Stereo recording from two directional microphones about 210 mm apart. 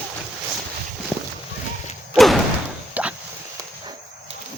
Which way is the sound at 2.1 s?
Centre (ahead or behind).